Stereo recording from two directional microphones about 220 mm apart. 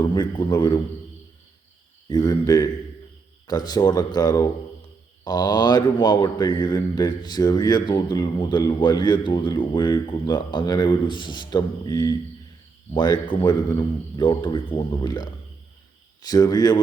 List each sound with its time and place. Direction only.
0.0 s a man's voice: 20° left (ahead or behind)
2.0 s speech: 20° left (ahead or behind)